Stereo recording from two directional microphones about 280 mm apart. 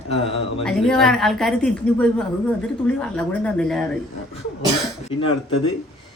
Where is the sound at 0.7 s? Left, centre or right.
Centre.